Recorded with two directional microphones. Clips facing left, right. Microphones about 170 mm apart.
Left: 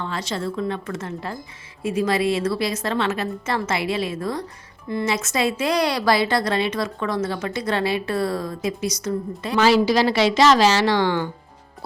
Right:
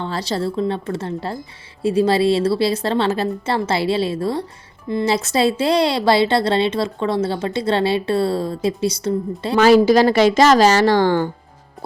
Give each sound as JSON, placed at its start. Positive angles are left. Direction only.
{"t": 0.0, "sound": "a woman's voice", "side_deg": -35}
{"t": 9.6, "sound": "a woman's voice", "side_deg": -50}